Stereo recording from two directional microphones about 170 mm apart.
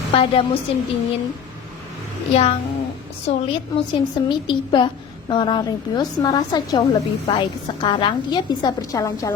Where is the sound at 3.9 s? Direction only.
25° left (ahead or behind).